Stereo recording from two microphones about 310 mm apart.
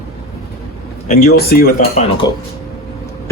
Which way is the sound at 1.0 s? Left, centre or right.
Left.